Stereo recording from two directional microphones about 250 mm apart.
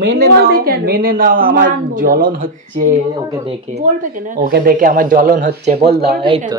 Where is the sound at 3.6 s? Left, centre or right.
Right.